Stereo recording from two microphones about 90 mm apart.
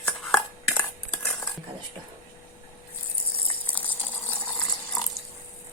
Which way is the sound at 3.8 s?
20° left (ahead or behind).